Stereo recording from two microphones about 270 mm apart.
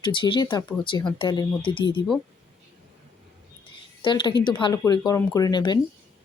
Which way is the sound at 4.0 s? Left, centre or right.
Centre.